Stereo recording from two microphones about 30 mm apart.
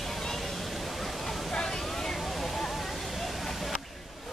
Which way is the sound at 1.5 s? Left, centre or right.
Centre.